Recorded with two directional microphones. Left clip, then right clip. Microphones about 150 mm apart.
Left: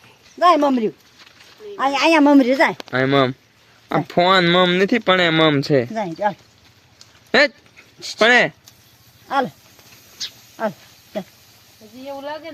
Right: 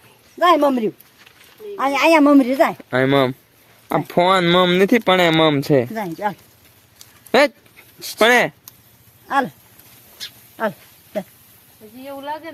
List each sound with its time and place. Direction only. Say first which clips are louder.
0.3 s speech: even; 20° right (ahead or behind)
1.7 s speech: even; centre (ahead or behind)
2.2 s a woman's voice: even; 35° left (ahead or behind)
2.9 s speech: right 1 dB; 35° right (ahead or behind)
3.8 s speech: even; 25° right (ahead or behind)
5.9 s speech: left 2 dB; 10° left (ahead or behind)
7.3 s dog: right 1 dB; 20° right (ahead or behind)
8.2 s speech: even; 35° right (ahead or behind)
9.2 s speech: right 1 dB; centre (ahead or behind)